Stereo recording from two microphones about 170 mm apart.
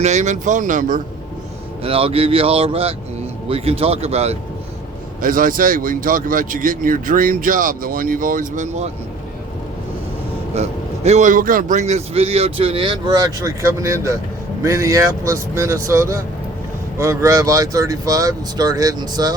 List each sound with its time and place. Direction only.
0.0 s speech: 45° right (ahead or behind)
1.8 s a man's voice: 35° right (ahead or behind)
5.2 s speech: 55° right (ahead or behind)
10.5 s a man's voice: 40° right (ahead or behind); by 19.4 s 25° right (ahead or behind)